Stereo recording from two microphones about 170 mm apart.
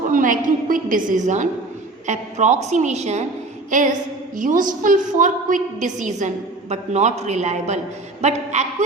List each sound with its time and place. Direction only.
0.1 s a woman's voice: 50° right (ahead or behind)
3.7 s a sound: 50° right (ahead or behind)
4.4 s a woman's voice: 50° right (ahead or behind)